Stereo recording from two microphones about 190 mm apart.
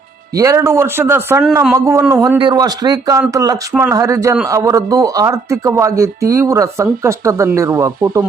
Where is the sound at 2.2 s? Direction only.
20° right (ahead or behind).